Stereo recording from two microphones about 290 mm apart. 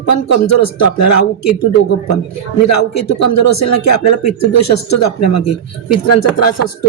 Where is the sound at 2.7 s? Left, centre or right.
Left.